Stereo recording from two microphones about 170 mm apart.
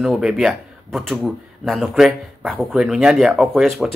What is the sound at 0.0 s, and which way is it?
Speech, centre (ahead or behind).